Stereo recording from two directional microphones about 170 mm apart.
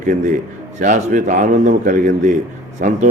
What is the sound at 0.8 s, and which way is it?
A man's voice, 50° right (ahead or behind).